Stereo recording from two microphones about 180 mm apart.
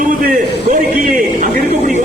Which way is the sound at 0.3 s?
45° right (ahead or behind).